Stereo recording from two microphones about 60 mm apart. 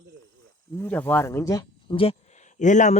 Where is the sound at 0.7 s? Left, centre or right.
Left.